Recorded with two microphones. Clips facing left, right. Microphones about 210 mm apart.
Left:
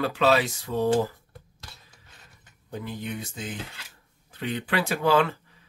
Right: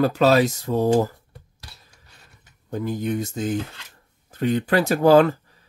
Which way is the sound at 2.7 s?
45° right (ahead or behind).